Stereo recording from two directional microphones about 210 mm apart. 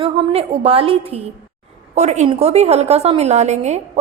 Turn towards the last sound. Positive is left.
turn(degrees=-35)  # may be behind; listen again after turning